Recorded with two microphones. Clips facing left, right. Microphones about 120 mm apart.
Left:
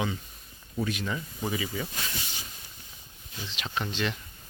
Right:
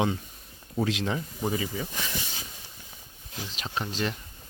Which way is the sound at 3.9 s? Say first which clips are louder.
Right 1 dB; 40° right (ahead or behind).